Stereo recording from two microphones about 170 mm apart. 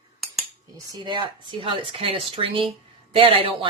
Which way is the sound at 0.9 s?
25° right (ahead or behind).